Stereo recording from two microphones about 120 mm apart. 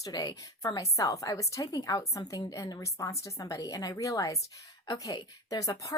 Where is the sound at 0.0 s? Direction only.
35° left (ahead or behind).